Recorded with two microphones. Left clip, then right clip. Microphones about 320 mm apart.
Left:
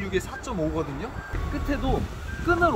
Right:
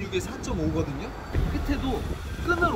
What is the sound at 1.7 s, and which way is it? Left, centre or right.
Speech, centre.